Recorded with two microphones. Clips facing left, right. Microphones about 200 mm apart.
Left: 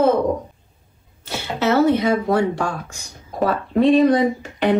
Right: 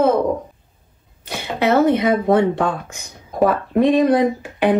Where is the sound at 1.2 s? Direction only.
15° right (ahead or behind).